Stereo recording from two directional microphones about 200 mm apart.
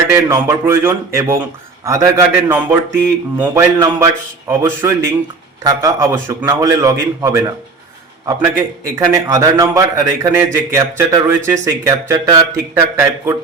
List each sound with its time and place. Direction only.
0.1 s a man's voice: 15° right (ahead or behind)